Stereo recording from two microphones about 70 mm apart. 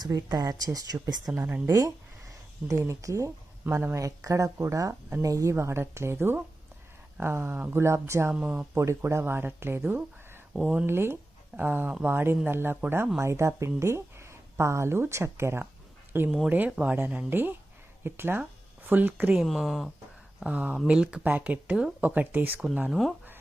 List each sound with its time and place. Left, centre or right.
0.0 s a woman's voice: right
1.3 s speech: right
1.6 s speech: right
8.3 s speech: centre
8.7 s speech: right
10.6 s speech: centre
10.8 s speech: right
19.4 s speech: centre
20.4 s speech: centre
22.9 s speech: centre